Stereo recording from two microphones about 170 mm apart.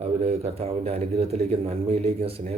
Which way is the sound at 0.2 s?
40° right (ahead or behind).